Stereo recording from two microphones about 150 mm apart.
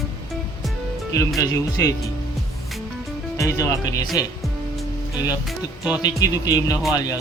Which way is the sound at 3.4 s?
20° left (ahead or behind).